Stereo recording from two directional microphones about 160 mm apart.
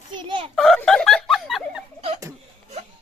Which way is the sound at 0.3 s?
30° right (ahead or behind).